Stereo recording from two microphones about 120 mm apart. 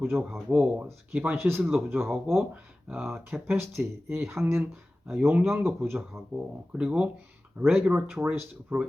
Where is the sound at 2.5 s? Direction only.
10° right (ahead or behind).